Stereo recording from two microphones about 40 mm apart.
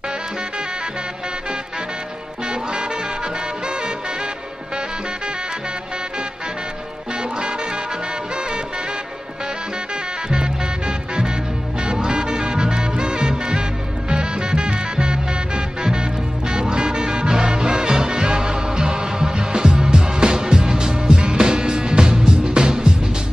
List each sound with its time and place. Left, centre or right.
2.4 s music: right
10.3 s music: centre